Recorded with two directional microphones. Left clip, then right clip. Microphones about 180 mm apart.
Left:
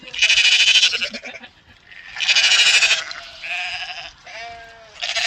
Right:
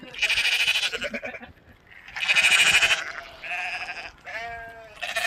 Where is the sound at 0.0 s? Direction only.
25° right (ahead or behind).